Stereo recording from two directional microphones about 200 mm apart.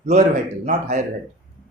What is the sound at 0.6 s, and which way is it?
Speech, 40° right (ahead or behind).